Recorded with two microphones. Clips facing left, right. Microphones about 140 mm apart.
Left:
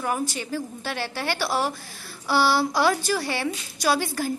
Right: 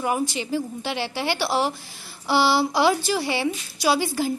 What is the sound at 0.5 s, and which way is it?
A woman's voice, 15° right (ahead or behind).